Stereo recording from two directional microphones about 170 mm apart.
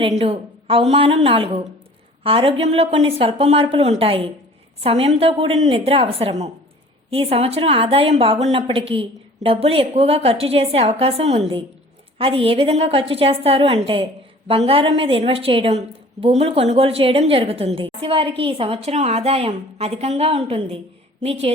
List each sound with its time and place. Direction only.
0.2 s a woman's voice: 35° right (ahead or behind)